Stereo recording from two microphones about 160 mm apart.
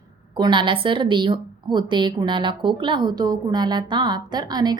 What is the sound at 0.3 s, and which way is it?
A woman's voice, 30° right (ahead or behind).